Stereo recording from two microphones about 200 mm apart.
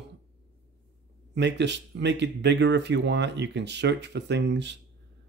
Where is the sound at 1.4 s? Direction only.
60° right (ahead or behind).